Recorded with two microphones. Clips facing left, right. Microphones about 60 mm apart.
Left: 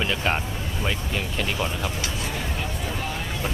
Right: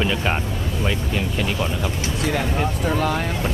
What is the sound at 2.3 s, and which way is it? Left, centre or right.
Speech, right.